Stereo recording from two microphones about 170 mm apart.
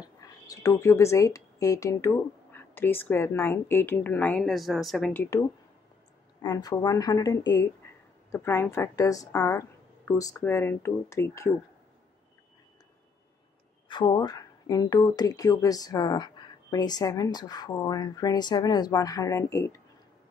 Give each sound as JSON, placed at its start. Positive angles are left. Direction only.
{"t": 0.5, "sound": "speech", "side_deg": 20}
{"t": 5.1, "sound": "speech", "side_deg": 15}
{"t": 6.4, "sound": "speech", "side_deg": 20}
{"t": 13.8, "sound": "speech", "side_deg": 25}